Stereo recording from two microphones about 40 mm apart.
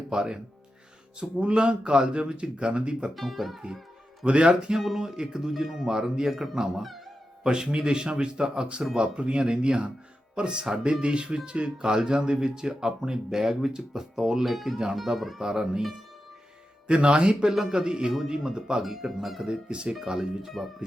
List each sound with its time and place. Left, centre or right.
0.1 s a man's voice: centre
3.2 s speech: centre
4.3 s a man's voice: right
4.9 s a man's voice: centre
11.8 s speech: centre
16.8 s a man's voice: right
17.5 s speech: centre
19.5 s a man's voice: right
20.1 s speech: centre